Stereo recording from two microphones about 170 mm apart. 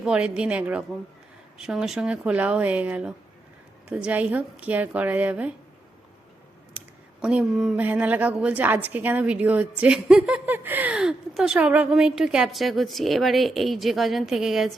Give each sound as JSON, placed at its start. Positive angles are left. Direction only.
{"t": 0.0, "sound": "speech", "side_deg": -5}
{"t": 6.7, "sound": "speech", "side_deg": -5}